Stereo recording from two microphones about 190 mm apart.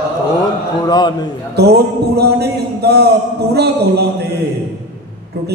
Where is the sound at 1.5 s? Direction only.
55° right (ahead or behind).